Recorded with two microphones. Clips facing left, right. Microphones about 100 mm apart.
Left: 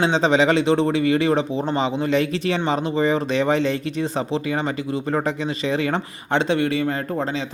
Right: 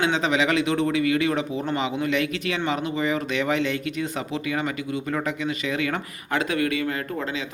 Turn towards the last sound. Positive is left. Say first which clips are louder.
# left 4 dB
turn(degrees=35)  # may be behind; listen again after turning